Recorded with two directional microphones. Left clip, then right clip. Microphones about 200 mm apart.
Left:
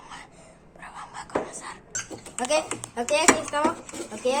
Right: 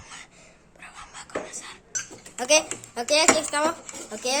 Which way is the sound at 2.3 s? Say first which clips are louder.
Right 4 dB; 40° right (ahead or behind).